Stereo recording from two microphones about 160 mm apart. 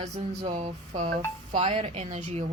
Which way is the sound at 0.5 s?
45° right (ahead or behind).